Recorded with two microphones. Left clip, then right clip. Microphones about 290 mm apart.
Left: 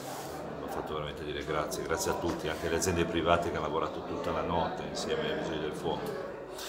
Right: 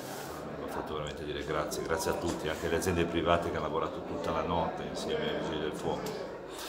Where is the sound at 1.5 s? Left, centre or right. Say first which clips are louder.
Even; centre.